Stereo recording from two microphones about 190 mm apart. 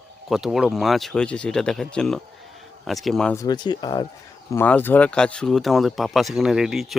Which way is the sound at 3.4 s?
20° left (ahead or behind).